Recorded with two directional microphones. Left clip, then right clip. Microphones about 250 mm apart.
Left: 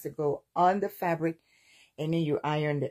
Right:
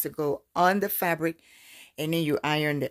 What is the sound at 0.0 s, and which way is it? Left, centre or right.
Speech, right.